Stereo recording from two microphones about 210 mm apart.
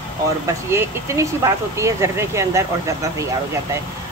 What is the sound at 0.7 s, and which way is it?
Speech, 15° right (ahead or behind).